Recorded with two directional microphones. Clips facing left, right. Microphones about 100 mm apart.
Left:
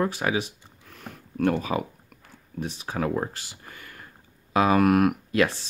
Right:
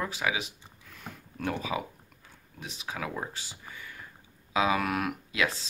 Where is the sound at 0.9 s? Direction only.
50° left (ahead or behind).